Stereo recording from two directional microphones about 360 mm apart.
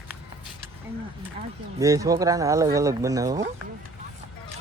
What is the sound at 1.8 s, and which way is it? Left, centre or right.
Speech, centre.